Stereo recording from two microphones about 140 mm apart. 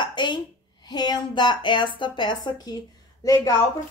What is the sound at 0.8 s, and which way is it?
A woman's voice, 30° left (ahead or behind).